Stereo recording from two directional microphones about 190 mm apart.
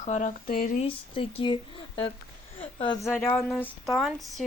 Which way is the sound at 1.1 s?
25° left (ahead or behind).